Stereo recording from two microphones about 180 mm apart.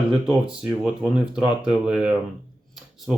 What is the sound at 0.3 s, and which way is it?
Speech, 5° right (ahead or behind).